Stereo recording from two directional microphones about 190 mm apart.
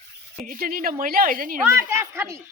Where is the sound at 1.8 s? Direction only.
15° right (ahead or behind).